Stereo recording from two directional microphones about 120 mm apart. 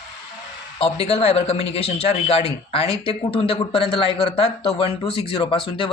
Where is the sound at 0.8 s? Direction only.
55° left (ahead or behind).